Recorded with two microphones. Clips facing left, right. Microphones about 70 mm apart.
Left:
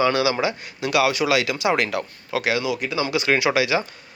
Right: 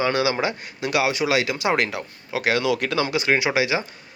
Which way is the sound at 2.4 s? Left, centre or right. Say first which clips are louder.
Right 2 dB; right.